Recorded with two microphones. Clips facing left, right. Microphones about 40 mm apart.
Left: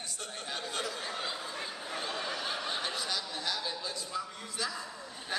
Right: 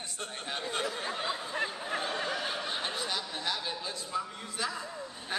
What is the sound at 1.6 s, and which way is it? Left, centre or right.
Snicker, right.